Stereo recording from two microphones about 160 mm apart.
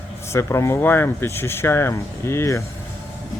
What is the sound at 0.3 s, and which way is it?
Speech, 15° left (ahead or behind).